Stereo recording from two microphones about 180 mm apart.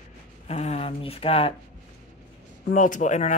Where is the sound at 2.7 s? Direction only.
45° left (ahead or behind).